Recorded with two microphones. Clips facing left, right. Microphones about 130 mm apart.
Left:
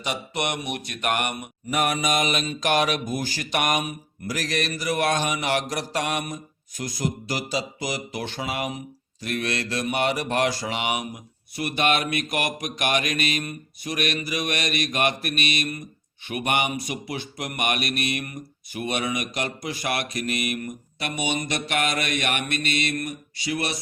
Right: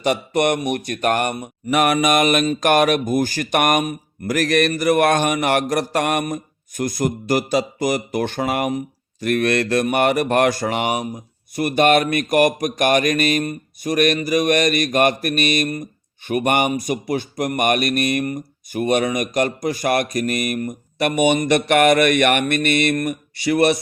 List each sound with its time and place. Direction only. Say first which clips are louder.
0.0 s mantra: right 10 dB; 50° right (ahead or behind)
0.9 s speech: right 5 dB; 40° right (ahead or behind)
1.7 s speech: right 7 dB; 75° right (ahead or behind); by 11.0 s 45° right (ahead or behind)
11.5 s mantra: right 8 dB; 45° right (ahead or behind)
21.0 s speech: right 11 dB; 55° right (ahead or behind)